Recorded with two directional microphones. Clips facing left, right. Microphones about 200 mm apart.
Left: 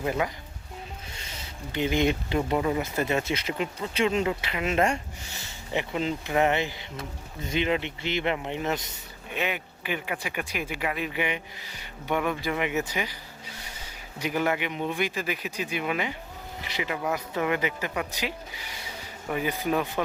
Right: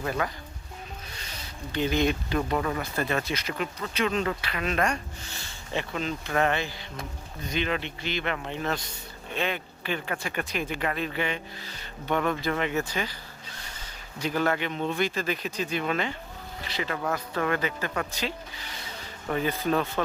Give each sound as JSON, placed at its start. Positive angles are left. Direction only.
{"t": 0.0, "sound": "speech", "side_deg": 20}
{"t": 14.2, "sound": "speech", "side_deg": 15}